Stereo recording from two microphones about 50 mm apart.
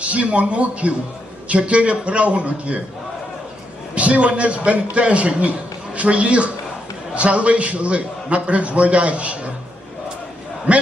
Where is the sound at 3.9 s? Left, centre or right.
Right.